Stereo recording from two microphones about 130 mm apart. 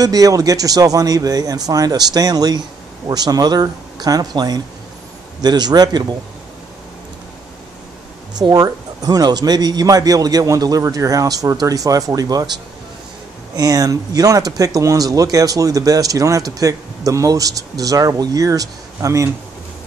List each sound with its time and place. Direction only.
0.0 s speech: 25° right (ahead or behind)
8.4 s speech: 30° right (ahead or behind)
13.6 s speech: 30° right (ahead or behind)